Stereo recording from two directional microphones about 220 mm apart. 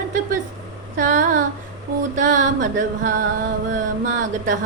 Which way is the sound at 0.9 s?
35° right (ahead or behind).